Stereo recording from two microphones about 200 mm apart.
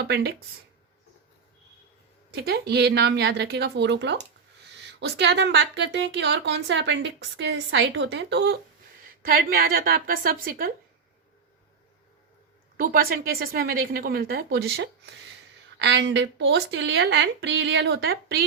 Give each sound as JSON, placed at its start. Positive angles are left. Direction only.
{"t": 0.0, "sound": "a woman's voice", "side_deg": -55}
{"t": 2.3, "sound": "a woman's voice", "side_deg": -50}
{"t": 12.7, "sound": "a woman's voice", "side_deg": -45}
{"t": 15.8, "sound": "speech", "side_deg": -60}